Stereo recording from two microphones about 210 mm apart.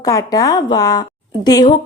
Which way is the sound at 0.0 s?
15° left (ahead or behind).